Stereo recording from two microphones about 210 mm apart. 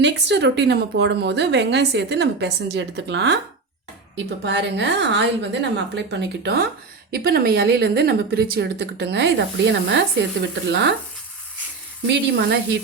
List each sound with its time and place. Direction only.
0.0 s a woman's voice: 55° right (ahead or behind)
4.4 s a woman's voice: 55° right (ahead or behind)
12.0 s a woman's voice: 55° right (ahead or behind)